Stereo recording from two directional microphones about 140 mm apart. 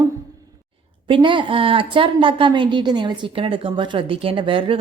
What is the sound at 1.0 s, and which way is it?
A woman's voice, 35° right (ahead or behind).